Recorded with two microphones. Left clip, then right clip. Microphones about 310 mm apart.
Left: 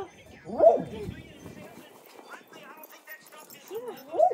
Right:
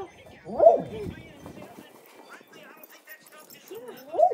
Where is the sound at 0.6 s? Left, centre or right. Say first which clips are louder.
Right 2 dB; right.